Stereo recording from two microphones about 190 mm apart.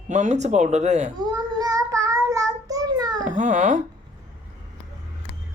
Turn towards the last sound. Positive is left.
turn(degrees=-40)  # may be behind; listen again after turning